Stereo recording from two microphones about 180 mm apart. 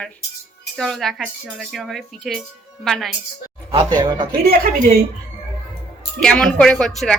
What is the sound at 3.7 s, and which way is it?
Speech, 30° right (ahead or behind).